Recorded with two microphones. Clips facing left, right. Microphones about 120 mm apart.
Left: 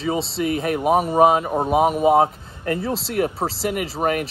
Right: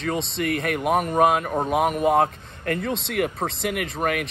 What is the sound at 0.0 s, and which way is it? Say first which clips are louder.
Speech: left 3 dB; 5° left (ahead or behind).